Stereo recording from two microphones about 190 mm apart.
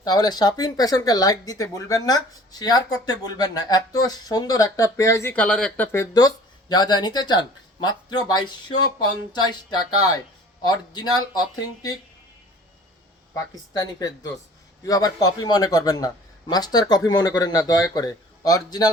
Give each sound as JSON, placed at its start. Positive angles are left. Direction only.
{"t": 0.0, "sound": "speech", "side_deg": 20}
{"t": 13.7, "sound": "speech", "side_deg": 20}